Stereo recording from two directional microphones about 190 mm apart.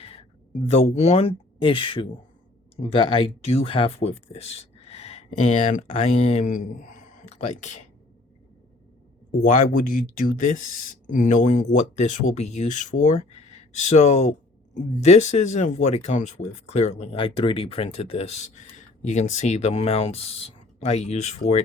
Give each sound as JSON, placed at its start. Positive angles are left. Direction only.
{"t": 0.0, "sound": "speech", "side_deg": 30}
{"t": 9.4, "sound": "speech", "side_deg": 45}